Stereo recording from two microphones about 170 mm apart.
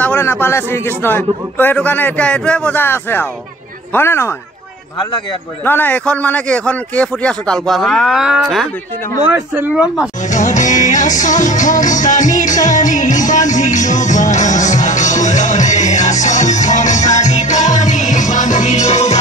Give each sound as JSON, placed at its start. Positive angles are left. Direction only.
{"t": 0.0, "sound": "a man's voice", "side_deg": 15}
{"t": 5.7, "sound": "a man's voice", "side_deg": 10}
{"t": 10.3, "sound": "music", "side_deg": 45}